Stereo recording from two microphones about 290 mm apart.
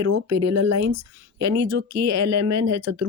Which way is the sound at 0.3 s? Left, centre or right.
Right.